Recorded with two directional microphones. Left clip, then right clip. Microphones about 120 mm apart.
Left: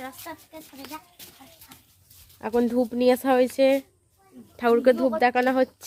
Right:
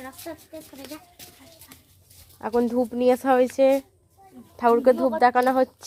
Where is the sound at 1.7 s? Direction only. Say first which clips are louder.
Even; 25° right (ahead or behind).